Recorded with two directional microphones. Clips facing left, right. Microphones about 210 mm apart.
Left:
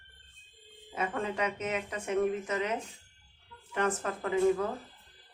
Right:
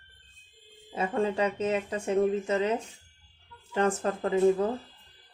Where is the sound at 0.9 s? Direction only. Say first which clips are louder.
Right 6 dB; 30° right (ahead or behind).